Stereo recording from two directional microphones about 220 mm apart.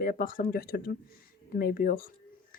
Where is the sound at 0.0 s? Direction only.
40° left (ahead or behind).